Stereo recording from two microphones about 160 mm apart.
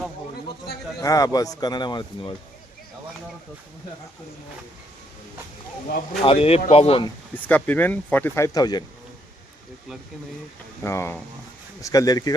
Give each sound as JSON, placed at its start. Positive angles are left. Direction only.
{"t": 1.0, "sound": "speech", "side_deg": 20}
{"t": 6.2, "sound": "speech", "side_deg": 35}
{"t": 7.3, "sound": "speech", "side_deg": 10}
{"t": 8.5, "sound": "speech", "side_deg": 25}
{"t": 10.8, "sound": "speech", "side_deg": 15}